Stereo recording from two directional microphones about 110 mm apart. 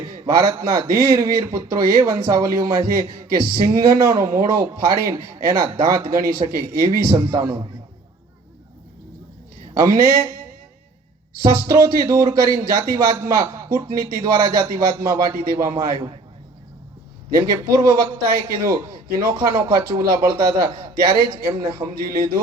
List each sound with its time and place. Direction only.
0.3 s a man's voice: 25° right (ahead or behind)
9.7 s a man's voice: 25° right (ahead or behind)
11.5 s a man's voice: 25° right (ahead or behind)
17.3 s a man's voice: 30° right (ahead or behind)